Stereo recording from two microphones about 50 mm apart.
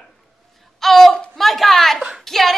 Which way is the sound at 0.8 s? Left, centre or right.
Centre.